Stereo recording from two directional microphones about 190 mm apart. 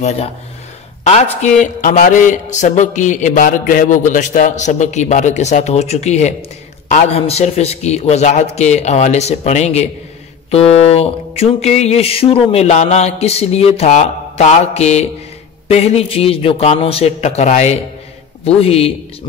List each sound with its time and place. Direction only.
1.0 s speech: 35° left (ahead or behind)